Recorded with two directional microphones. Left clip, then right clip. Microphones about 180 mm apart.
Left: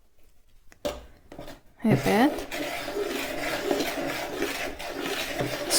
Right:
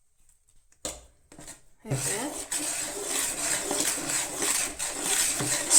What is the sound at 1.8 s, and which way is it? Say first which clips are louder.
Speech: left 12 dB; 50° left (ahead or behind).